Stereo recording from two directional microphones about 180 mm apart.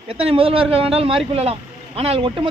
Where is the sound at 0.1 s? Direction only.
30° right (ahead or behind).